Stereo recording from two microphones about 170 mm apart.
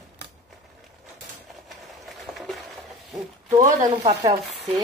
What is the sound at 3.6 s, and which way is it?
Speech, 20° right (ahead or behind).